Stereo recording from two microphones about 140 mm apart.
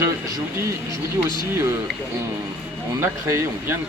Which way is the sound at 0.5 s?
20° right (ahead or behind).